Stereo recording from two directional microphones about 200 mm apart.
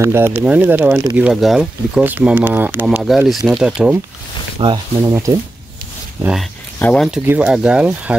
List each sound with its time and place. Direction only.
0.0 s speech: 10° right (ahead or behind)
4.6 s speech: 25° right (ahead or behind)
6.8 s speech: centre (ahead or behind)